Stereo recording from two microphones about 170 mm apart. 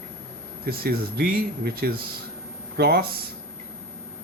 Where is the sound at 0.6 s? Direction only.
65° right (ahead or behind).